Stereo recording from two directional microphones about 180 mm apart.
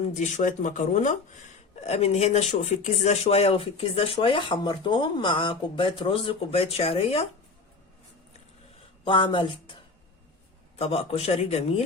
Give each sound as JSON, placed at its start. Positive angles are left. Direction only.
{"t": 0.0, "sound": "speech", "side_deg": 40}
{"t": 9.0, "sound": "speech", "side_deg": 25}
{"t": 10.8, "sound": "speech", "side_deg": 35}